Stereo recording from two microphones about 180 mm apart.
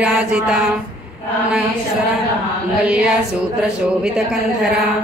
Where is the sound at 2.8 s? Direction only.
5° right (ahead or behind).